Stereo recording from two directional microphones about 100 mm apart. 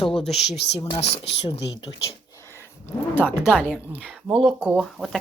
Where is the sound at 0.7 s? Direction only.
85° left.